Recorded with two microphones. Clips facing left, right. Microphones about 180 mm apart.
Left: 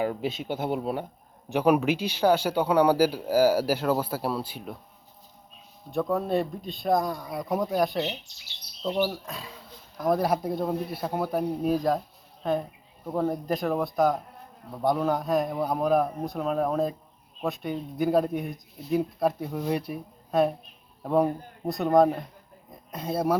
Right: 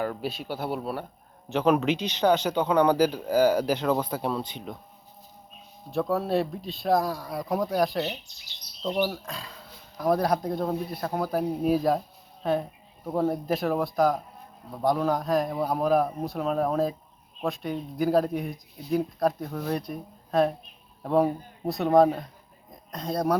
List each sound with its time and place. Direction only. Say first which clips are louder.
0.0 s speech: left 2 dB; 20° left (ahead or behind)
5.9 s speech: even; centre (ahead or behind)